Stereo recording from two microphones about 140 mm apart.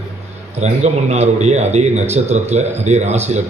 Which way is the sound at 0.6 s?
50° right (ahead or behind).